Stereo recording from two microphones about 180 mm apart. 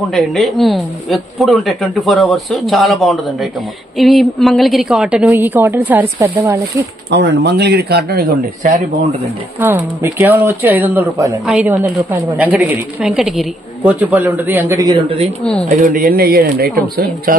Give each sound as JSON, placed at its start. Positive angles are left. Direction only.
{"t": 0.1, "sound": "a woman's voice", "side_deg": 0}
{"t": 7.1, "sound": "speech", "side_deg": -75}
{"t": 9.6, "sound": "a woman's voice", "side_deg": -10}
{"t": 15.7, "sound": "speech", "side_deg": -50}